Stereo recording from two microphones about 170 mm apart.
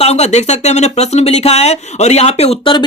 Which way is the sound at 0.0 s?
40° left (ahead or behind).